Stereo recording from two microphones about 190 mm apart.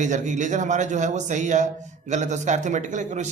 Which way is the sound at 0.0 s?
40° right (ahead or behind).